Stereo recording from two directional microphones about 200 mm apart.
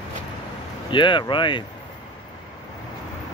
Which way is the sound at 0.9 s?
25° left (ahead or behind).